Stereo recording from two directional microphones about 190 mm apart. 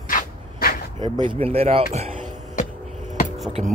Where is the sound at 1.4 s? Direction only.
30° right (ahead or behind).